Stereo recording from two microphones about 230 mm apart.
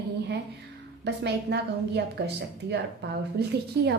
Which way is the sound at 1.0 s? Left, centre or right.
Right.